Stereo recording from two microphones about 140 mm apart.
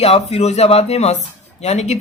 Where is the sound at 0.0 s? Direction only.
45° left (ahead or behind).